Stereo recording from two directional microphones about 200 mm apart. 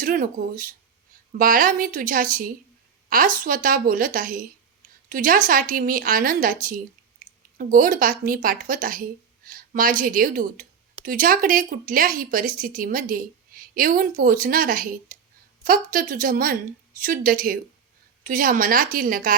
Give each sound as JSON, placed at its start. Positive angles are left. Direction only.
{"t": 0.0, "sound": "speech", "side_deg": -45}